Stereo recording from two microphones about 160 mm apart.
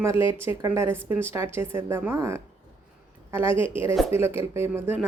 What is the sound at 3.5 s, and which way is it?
Speech, 35° left (ahead or behind).